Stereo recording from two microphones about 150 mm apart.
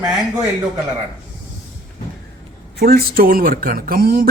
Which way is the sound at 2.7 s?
90° right.